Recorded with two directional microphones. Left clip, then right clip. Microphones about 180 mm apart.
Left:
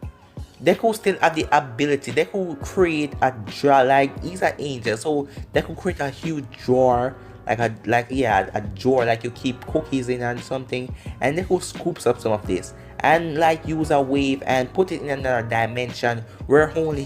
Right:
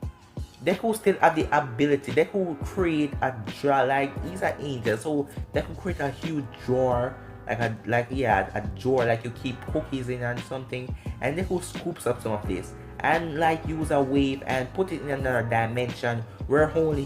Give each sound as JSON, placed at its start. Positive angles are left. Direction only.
{"t": 0.6, "sound": "speech", "side_deg": 40}
{"t": 11.4, "sound": "speech", "side_deg": 0}
{"t": 12.0, "sound": "speech", "side_deg": 40}